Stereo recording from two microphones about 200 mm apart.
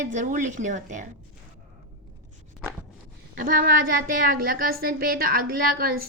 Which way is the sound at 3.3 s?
45° right (ahead or behind).